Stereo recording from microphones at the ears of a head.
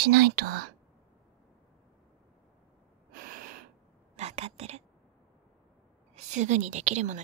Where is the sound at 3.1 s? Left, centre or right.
Right.